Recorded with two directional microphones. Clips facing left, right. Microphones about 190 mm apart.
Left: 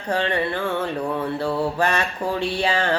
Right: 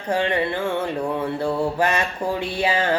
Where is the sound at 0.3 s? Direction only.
20° right (ahead or behind).